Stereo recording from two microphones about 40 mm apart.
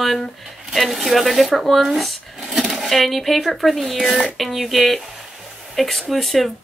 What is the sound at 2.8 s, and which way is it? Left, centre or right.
A woman's voice, centre.